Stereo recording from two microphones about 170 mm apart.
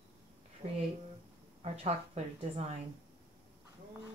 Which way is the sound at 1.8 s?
40° right (ahead or behind).